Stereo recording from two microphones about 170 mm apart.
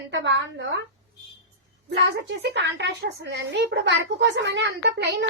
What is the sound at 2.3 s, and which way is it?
A child's voice, 90° right.